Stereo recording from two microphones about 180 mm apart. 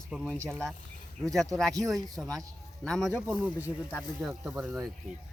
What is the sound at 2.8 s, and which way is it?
Speech, 5° left (ahead or behind).